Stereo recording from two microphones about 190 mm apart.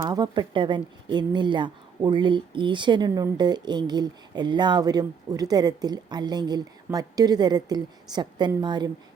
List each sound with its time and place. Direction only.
0.0 s speech: 20° right (ahead or behind)